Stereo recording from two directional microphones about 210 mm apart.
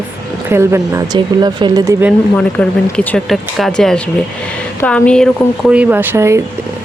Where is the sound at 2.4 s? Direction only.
5° left (ahead or behind).